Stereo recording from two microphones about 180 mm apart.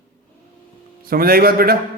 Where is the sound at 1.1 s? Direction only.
55° right (ahead or behind).